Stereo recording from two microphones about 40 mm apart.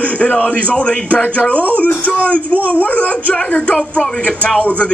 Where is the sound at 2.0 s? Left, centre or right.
Left.